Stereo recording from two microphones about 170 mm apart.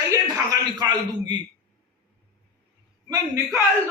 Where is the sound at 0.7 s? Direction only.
25° right (ahead or behind).